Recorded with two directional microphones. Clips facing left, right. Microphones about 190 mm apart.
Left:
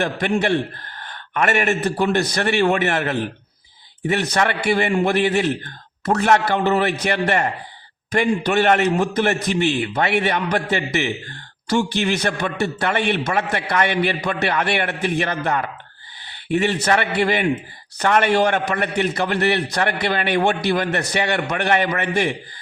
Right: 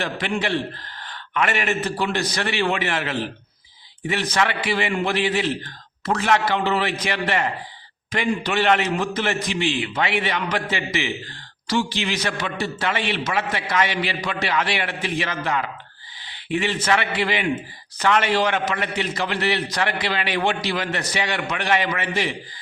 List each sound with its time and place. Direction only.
0.0 s a man's voice: 50° left (ahead or behind)